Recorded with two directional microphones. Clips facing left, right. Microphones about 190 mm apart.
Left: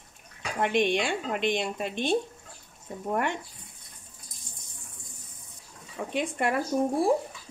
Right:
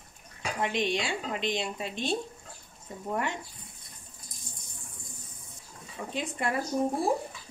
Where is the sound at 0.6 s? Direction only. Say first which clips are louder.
Left 5 dB; 55° left (ahead or behind).